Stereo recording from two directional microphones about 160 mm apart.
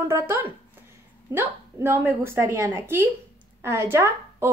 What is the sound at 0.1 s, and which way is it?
Speech, 15° right (ahead or behind).